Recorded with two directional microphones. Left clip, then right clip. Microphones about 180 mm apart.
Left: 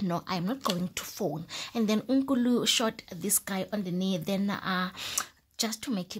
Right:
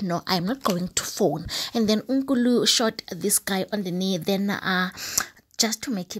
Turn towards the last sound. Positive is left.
turn(degrees=-20)  # may be behind; listen again after turning